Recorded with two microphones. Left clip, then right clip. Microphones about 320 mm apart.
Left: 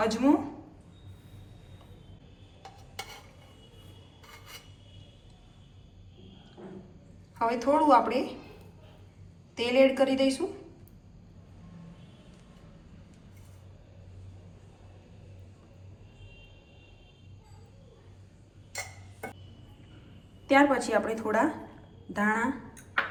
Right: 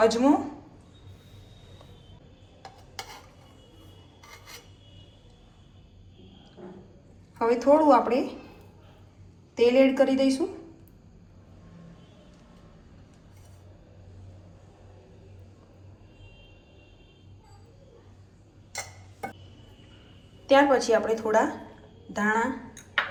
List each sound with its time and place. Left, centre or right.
0.0 s a woman's voice: centre
7.3 s a woman's voice: centre
9.6 s a woman's voice: right
20.5 s a woman's voice: centre